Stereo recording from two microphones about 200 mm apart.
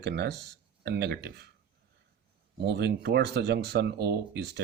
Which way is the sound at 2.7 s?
55° right (ahead or behind).